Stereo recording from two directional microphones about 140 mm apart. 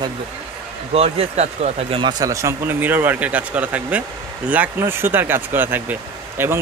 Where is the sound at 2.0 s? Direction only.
25° right (ahead or behind).